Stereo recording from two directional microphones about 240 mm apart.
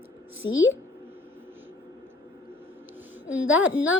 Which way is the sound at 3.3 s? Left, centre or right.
Centre.